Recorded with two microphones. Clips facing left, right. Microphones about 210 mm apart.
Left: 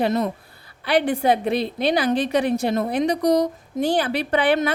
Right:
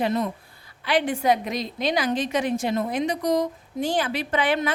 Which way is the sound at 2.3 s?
35° left (ahead or behind).